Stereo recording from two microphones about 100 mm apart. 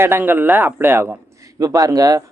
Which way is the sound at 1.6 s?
35° right (ahead or behind).